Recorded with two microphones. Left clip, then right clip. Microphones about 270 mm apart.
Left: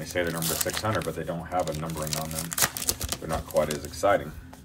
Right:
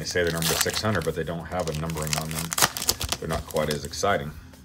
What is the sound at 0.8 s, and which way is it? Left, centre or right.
Speech, right.